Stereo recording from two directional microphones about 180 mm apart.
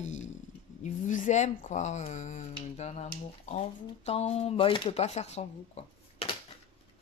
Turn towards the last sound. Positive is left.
turn(degrees=35)  # may be behind; listen again after turning